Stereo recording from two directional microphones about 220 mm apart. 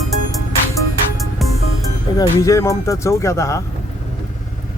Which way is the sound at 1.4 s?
Centre (ahead or behind).